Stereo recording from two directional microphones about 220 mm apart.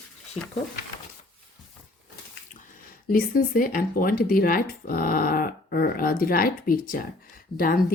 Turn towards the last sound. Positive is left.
turn(degrees=40)  # may be behind; listen again after turning